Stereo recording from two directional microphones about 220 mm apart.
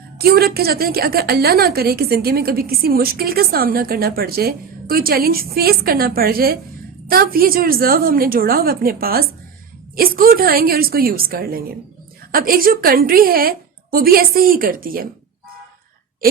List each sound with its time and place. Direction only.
0.2 s a woman's voice: 45° right (ahead or behind)